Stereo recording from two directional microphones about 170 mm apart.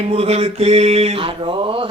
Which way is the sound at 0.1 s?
35° right (ahead or behind).